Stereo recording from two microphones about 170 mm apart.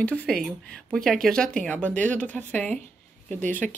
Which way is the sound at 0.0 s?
10° left (ahead or behind).